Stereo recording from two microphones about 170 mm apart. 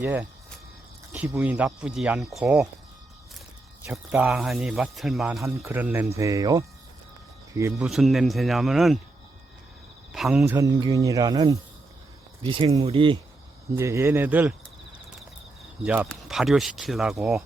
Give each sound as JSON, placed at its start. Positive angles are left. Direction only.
{"t": 0.0, "sound": "speech", "side_deg": -10}
{"t": 3.9, "sound": "speech", "side_deg": -5}
{"t": 5.4, "sound": "speech", "side_deg": -15}
{"t": 7.8, "sound": "speech", "side_deg": 0}
{"t": 10.1, "sound": "cricket", "side_deg": 0}
{"t": 10.4, "sound": "speech", "side_deg": -15}
{"t": 13.7, "sound": "speech", "side_deg": -15}
{"t": 15.8, "sound": "speech", "side_deg": -10}